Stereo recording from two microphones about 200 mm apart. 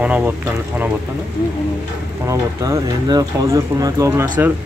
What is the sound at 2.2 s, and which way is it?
Speech, 15° right (ahead or behind).